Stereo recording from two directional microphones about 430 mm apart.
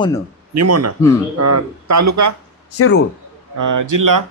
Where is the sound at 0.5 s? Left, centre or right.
Right.